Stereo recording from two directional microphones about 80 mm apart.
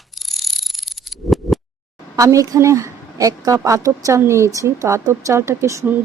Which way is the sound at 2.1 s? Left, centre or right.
Right.